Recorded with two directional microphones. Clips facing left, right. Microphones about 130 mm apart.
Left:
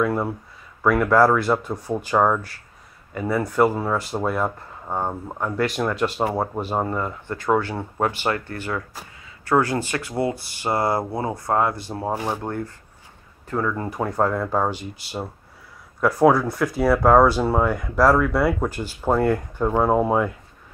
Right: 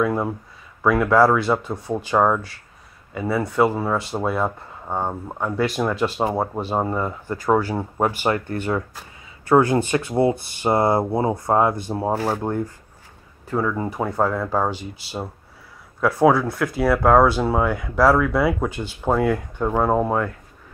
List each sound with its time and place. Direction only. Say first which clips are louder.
0.1 s speech: right 1 dB; 15° right (ahead or behind)
0.8 s speech: right 1 dB; 5° right (ahead or behind)